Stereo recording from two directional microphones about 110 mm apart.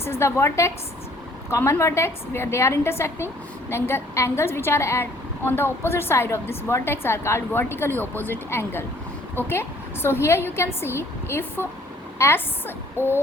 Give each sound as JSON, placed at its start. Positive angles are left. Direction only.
{"t": 0.0, "sound": "a woman's voice", "side_deg": 25}